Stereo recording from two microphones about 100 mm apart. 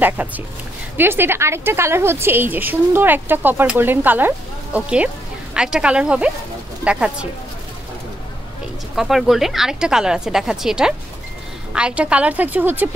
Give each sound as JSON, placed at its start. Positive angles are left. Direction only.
{"t": 0.2, "sound": "a woman's voice", "side_deg": -15}
{"t": 8.9, "sound": "a woman's voice", "side_deg": -5}